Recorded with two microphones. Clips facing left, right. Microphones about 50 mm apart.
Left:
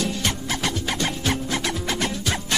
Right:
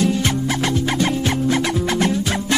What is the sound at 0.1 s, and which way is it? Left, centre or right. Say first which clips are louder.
Music: right 6 dB; right.